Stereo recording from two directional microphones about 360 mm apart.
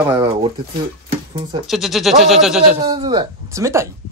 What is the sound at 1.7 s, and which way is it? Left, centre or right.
Speech, centre.